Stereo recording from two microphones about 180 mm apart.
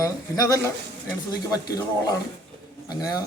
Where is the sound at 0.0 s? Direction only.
20° left (ahead or behind).